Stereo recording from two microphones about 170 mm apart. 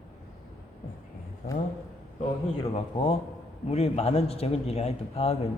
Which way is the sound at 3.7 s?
40° left (ahead or behind).